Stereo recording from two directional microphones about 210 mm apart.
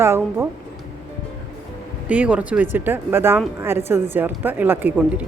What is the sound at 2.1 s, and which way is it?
Speech, 5° right (ahead or behind).